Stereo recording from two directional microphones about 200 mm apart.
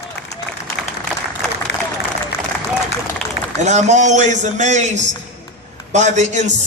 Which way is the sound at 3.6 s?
35° right (ahead or behind).